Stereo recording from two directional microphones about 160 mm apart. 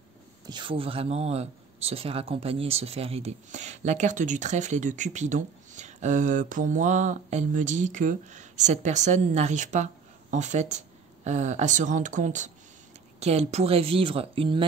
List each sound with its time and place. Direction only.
0.5 s speech: 30° right (ahead or behind)